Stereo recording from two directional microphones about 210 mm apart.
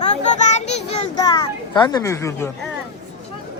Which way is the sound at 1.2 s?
20° left (ahead or behind).